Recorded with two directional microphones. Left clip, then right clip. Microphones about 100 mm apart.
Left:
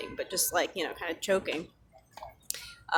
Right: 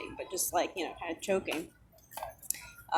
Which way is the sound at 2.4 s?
40° left (ahead or behind).